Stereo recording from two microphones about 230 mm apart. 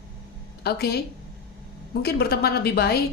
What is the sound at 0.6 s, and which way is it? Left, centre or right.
A woman's voice, left.